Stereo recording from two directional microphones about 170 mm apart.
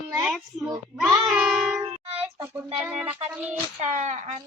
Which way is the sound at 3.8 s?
45° right (ahead or behind).